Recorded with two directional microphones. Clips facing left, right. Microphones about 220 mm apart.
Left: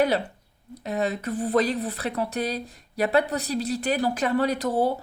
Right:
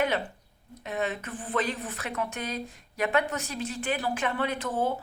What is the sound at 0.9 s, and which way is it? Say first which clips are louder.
Speech: left 5 dB; 40° left (ahead or behind).